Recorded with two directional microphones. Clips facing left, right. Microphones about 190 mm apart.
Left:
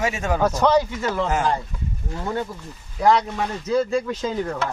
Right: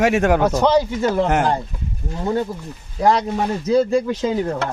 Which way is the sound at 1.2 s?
65° right (ahead or behind).